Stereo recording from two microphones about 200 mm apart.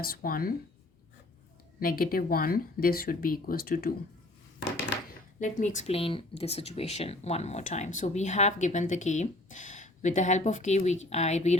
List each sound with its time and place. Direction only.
0.0 s speech: 45° left (ahead or behind)
1.8 s speech: 45° left (ahead or behind)
5.4 s speech: 35° left (ahead or behind)